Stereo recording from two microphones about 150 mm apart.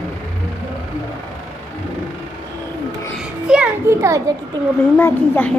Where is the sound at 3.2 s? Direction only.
5° right (ahead or behind).